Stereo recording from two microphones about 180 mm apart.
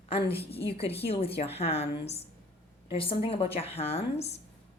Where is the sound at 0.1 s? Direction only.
30° left (ahead or behind).